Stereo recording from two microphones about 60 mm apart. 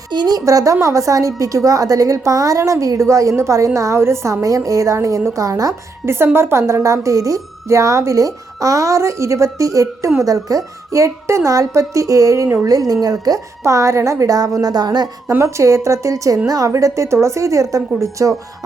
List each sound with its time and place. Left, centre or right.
0.3 s a woman's voice: right
6.1 s speech: right
12.6 s a woman's voice: right
15.4 s speech: right
16.5 s speech: right